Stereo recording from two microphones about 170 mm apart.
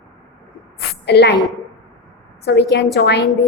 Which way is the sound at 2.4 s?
75° left (ahead or behind).